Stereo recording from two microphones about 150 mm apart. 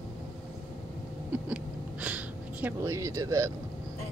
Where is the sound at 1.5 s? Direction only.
10° right (ahead or behind).